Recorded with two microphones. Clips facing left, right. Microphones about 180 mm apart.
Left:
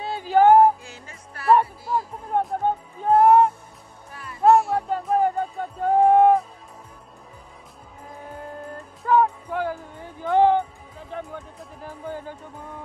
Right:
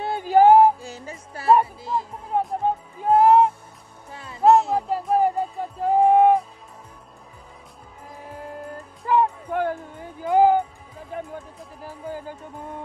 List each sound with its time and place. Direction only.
0.0 s music: 55° right (ahead or behind)
0.4 s music: 35° right (ahead or behind)
2.3 s music: centre (ahead or behind)
4.1 s music: 25° right (ahead or behind)
4.8 s music: 5° right (ahead or behind)
9.0 s music: 10° right (ahead or behind)
9.5 s music: 55° right (ahead or behind)
10.2 s music: 5° right (ahead or behind)
11.8 s music: 5° right (ahead or behind)